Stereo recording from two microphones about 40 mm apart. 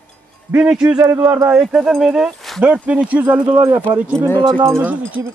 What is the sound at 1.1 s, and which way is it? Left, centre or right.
Speech, right.